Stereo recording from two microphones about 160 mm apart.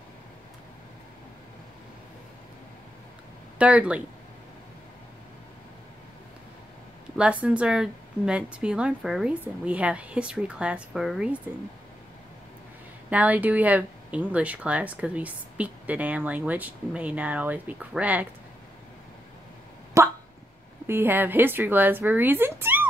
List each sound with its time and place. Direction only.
3.5 s speech: 10° right (ahead or behind)
7.2 s speech: 10° right (ahead or behind)
13.1 s speech: 10° right (ahead or behind)
20.0 s speech: 15° right (ahead or behind)